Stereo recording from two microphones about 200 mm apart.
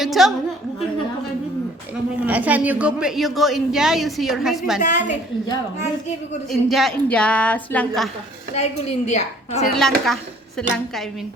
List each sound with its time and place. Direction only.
0.0 s a woman's voice: centre (ahead or behind)
2.2 s a woman's voice: 10° right (ahead or behind)
4.8 s a woman's voice: 40° left (ahead or behind)
6.5 s a woman's voice: centre (ahead or behind)
8.5 s a woman's voice: 35° left (ahead or behind)
9.7 s a woman's voice: centre (ahead or behind)